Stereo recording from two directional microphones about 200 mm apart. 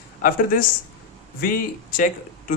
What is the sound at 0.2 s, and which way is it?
A man's voice, 45° left (ahead or behind).